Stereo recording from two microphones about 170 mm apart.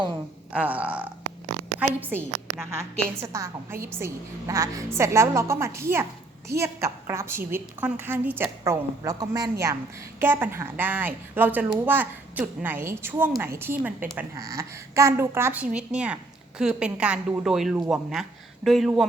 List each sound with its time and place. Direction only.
0.5 s a woman's voice: 10° right (ahead or behind)